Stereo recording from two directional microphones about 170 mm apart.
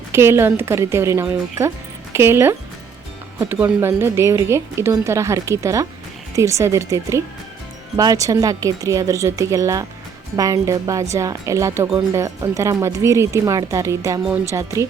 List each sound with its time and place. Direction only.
0.1 s speech: 15° right (ahead or behind)